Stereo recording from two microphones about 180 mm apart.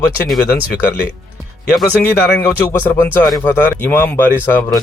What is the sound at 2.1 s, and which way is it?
Speech, 15° left (ahead or behind).